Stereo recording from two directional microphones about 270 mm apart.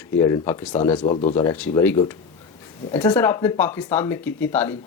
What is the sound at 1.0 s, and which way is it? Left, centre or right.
Speech, left.